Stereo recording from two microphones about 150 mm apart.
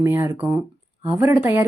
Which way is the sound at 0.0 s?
20° right (ahead or behind).